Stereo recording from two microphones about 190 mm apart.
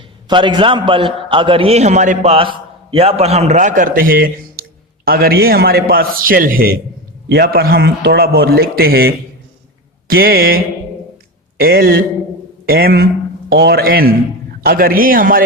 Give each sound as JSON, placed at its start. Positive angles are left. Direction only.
{"t": 0.3, "sound": "a man's voice", "side_deg": -25}